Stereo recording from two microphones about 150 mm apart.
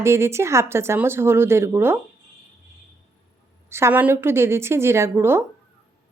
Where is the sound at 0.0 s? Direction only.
15° right (ahead or behind).